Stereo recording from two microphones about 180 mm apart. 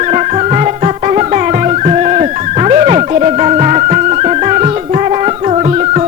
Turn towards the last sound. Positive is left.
turn(degrees=-35)  # may be behind; listen again after turning